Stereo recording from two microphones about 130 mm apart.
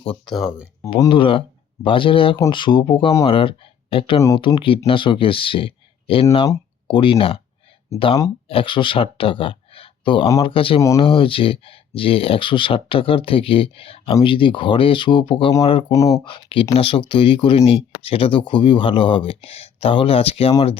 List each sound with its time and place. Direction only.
0.3 s speech: centre (ahead or behind)
1.1 s speech: 40° left (ahead or behind)
10.8 s speech: 25° left (ahead or behind)
11.0 s speech: 45° left (ahead or behind)
15.9 s speech: 25° left (ahead or behind)
16.2 s speech: 40° left (ahead or behind)